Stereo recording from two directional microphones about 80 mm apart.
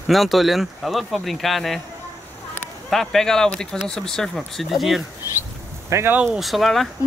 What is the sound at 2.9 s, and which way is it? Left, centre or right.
Speech, centre.